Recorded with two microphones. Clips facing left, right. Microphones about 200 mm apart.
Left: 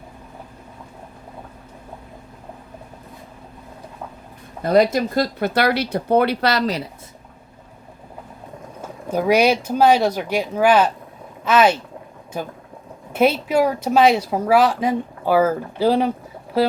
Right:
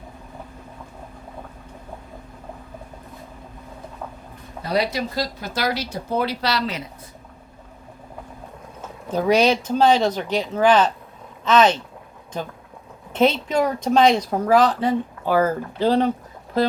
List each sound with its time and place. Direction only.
4.6 s speech: 50° left (ahead or behind)
8.8 s speech: 10° left (ahead or behind)